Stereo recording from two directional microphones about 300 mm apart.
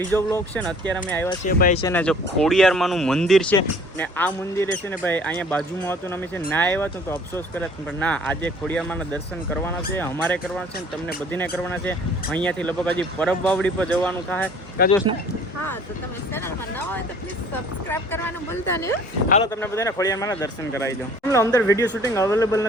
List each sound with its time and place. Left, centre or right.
0.1 s speech: centre
1.5 s speech: left
1.8 s speech: centre
14.8 s speech: left
16.3 s speech: centre
19.5 s speech: centre